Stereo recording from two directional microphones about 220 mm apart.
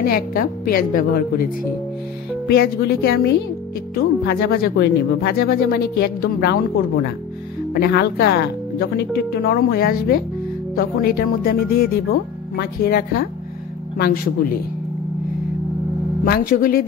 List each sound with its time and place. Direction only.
0.0 s a woman's voice: 40° left (ahead or behind)
16.3 s a woman's voice: 40° left (ahead or behind)